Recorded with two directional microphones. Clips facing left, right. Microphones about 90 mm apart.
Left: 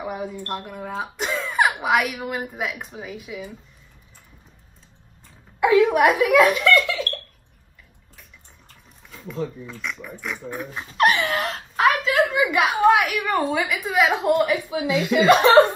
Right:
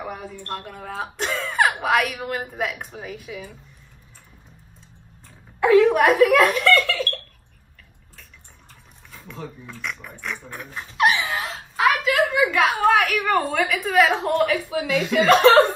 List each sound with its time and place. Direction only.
0.0 s speech: 15° left (ahead or behind)
5.6 s speech: 10° left (ahead or behind)
9.8 s speech: centre (ahead or behind)
11.0 s a sound: 55° left (ahead or behind)
12.0 s speech: 20° left (ahead or behind)
13.3 s speech: 5° left (ahead or behind)
14.0 s a woman's voice: 15° left (ahead or behind)